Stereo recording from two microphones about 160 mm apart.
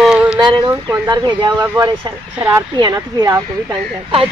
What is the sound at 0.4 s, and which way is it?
Speech, 30° right (ahead or behind).